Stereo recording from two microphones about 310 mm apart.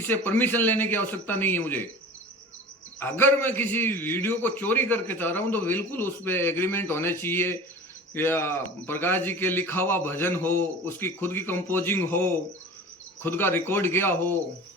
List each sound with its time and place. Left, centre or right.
0.1 s a man's voice: centre
3.0 s a man's voice: centre